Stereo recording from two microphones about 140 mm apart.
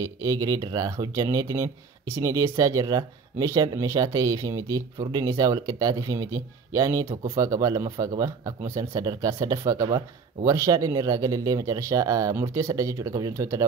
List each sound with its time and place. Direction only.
0.0 s speech: 25° right (ahead or behind)